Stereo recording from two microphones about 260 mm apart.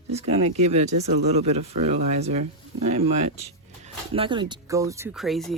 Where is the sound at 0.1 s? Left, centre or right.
Right.